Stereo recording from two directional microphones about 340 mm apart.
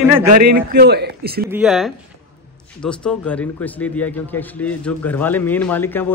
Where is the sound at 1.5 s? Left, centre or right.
Centre.